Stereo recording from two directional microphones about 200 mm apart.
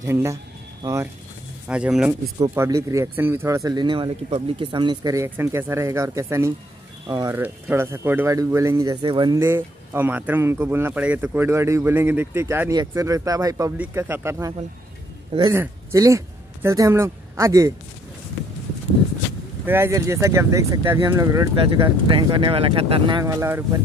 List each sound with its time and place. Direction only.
0.0 s speech: 15° right (ahead or behind)
1.7 s speech: 5° right (ahead or behind); by 9.4 s 20° right (ahead or behind)
9.4 s speech: 10° right (ahead or behind)
15.5 s speech: 15° right (ahead or behind)
19.6 s speech: 10° right (ahead or behind)
21.5 s speech: 25° right (ahead or behind)